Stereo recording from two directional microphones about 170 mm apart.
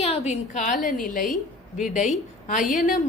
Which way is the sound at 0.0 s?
40° left (ahead or behind).